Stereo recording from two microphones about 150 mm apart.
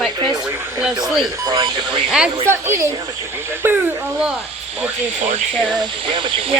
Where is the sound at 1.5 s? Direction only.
25° right (ahead or behind).